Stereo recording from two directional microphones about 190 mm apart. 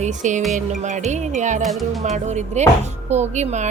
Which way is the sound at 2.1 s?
35° right (ahead or behind).